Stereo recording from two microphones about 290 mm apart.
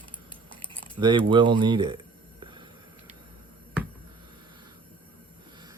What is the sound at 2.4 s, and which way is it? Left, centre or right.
Music, centre.